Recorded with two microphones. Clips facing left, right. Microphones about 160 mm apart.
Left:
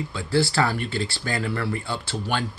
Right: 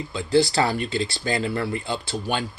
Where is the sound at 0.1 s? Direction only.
20° right (ahead or behind).